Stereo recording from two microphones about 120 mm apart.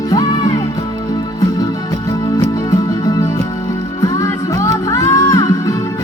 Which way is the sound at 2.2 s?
30° left (ahead or behind).